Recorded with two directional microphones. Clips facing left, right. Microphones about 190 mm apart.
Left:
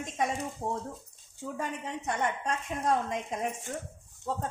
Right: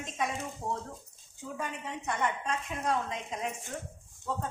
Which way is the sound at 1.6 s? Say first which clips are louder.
Left 2 dB; 40° left (ahead or behind).